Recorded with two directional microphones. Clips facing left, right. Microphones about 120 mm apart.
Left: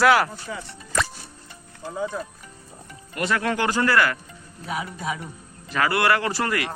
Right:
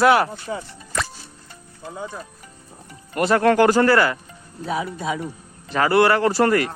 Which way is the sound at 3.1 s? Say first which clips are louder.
Right 8 dB; 40° right (ahead or behind).